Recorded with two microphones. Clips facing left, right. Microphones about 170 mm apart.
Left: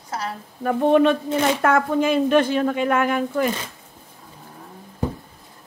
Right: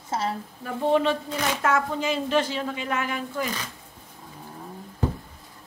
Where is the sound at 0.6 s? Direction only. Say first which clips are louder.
Left 6 dB; 60° left (ahead or behind).